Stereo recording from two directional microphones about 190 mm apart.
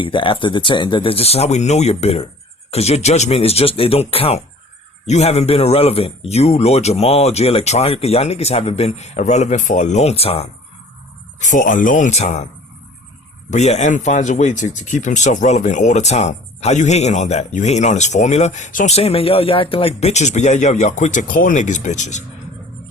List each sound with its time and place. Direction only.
0.0 s speech: 25° left (ahead or behind)
11.3 s speech: 40° left (ahead or behind)
13.5 s speech: 35° left (ahead or behind)